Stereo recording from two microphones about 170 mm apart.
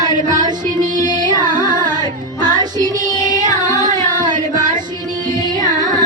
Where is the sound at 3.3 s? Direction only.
45° right (ahead or behind).